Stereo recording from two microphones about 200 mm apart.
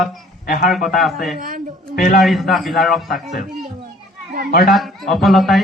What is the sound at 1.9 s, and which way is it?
Speech, 45° left (ahead or behind).